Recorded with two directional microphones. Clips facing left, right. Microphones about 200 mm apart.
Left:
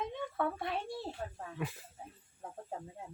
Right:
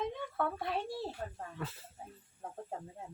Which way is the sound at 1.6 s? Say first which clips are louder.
Left 3 dB; 15° left (ahead or behind).